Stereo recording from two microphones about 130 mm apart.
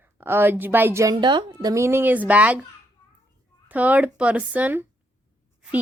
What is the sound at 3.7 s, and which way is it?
A woman's voice, 10° right (ahead or behind).